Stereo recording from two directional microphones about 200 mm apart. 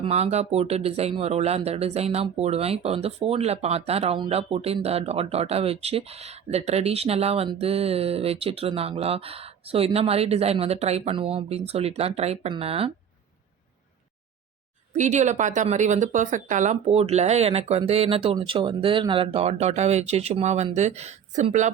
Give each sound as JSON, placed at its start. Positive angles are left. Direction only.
{"t": 0.0, "sound": "speech", "side_deg": -30}
{"t": 14.9, "sound": "speech", "side_deg": -35}